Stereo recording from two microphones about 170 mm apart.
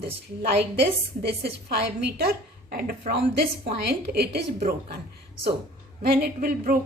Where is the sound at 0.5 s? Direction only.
80° right.